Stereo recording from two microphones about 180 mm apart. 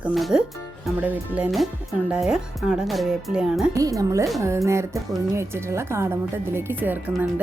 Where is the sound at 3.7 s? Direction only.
20° right (ahead or behind).